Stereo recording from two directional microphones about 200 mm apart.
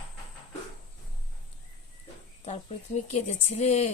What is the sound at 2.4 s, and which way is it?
Speech, 35° left (ahead or behind).